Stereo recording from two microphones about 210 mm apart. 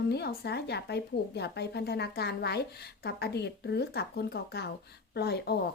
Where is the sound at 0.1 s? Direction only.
50° left (ahead or behind).